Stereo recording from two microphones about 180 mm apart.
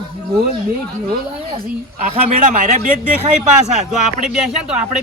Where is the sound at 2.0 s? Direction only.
45° right (ahead or behind).